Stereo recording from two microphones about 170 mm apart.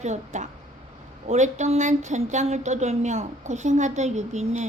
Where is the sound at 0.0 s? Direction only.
45° right (ahead or behind).